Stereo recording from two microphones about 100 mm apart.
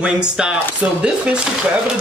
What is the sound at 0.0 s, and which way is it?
Speech, 10° right (ahead or behind).